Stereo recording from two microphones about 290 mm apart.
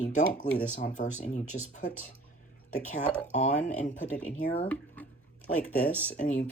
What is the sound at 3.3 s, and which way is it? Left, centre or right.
Speech, left.